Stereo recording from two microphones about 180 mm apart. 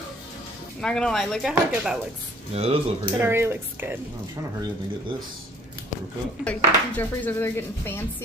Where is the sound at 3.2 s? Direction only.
15° right (ahead or behind).